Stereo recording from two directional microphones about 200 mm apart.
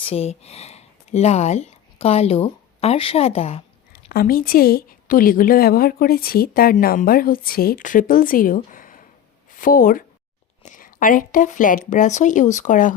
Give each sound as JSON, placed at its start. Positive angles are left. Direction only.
{"t": 0.0, "sound": "speech", "side_deg": 30}
{"t": 4.1, "sound": "a woman's voice", "side_deg": 45}